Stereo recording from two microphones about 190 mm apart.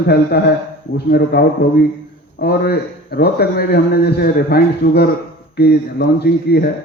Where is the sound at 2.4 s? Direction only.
55° left (ahead or behind).